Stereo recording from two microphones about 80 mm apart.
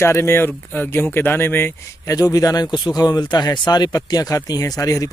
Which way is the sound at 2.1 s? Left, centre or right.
Left.